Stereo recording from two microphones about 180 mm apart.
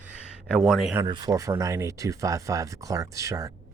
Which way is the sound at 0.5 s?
Centre (ahead or behind).